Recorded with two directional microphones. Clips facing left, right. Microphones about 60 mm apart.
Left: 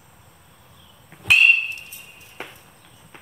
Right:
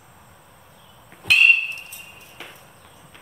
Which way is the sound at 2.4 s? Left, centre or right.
Left.